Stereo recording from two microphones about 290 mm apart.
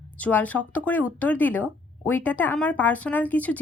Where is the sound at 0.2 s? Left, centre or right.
Centre.